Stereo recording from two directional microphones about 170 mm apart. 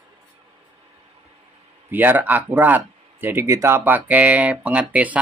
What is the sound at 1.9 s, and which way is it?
Speech, 10° right (ahead or behind).